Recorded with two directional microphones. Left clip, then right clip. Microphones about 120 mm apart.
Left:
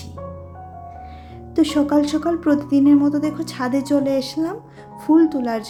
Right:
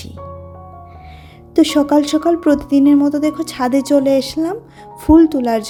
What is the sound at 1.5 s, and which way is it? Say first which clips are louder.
Speech: right 5 dB; 50° right (ahead or behind).